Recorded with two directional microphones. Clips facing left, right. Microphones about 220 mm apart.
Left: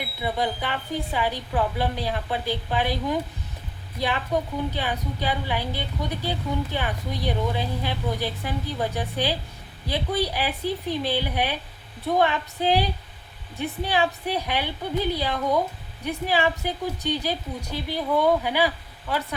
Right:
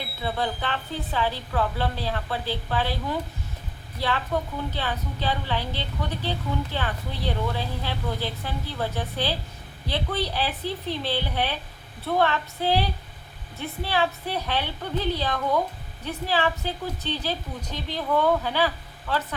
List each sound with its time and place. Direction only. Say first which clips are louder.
0.0 s a woman's voice: left 2 dB; 15° left (ahead or behind)